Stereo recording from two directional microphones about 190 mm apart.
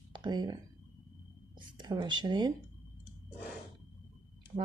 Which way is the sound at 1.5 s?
25° right (ahead or behind).